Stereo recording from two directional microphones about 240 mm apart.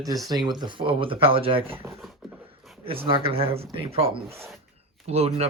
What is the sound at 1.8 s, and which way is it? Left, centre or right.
Speech, centre.